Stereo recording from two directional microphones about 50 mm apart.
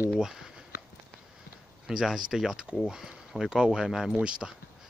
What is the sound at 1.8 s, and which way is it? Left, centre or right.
Speech, centre.